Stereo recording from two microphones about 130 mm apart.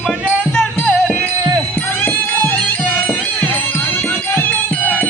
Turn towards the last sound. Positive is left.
turn(degrees=15)  # may be behind; listen again after turning